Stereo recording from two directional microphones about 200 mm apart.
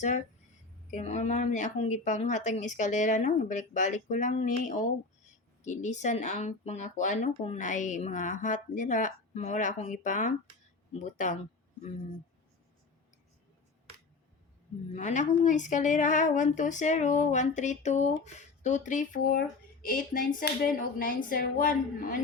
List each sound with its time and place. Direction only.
0.9 s speech: 35° left (ahead or behind)
14.9 s speech: 35° left (ahead or behind)